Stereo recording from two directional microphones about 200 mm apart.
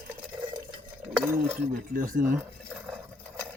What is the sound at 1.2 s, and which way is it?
Speech, 10° right (ahead or behind).